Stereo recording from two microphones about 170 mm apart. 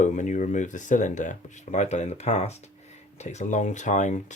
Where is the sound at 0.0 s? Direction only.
45° left (ahead or behind).